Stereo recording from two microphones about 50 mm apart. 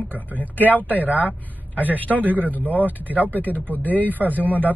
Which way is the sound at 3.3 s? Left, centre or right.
Left.